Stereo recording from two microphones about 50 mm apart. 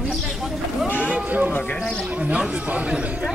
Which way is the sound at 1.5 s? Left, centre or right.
Left.